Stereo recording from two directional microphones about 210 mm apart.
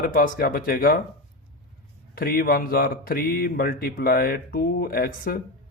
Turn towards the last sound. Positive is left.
turn(degrees=45)  # may be behind; listen again after turning